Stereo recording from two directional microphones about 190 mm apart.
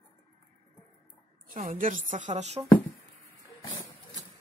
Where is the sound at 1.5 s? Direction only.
45° right (ahead or behind).